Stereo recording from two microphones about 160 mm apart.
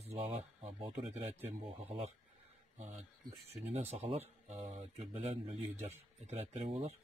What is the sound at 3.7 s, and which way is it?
Speech, 40° right (ahead or behind).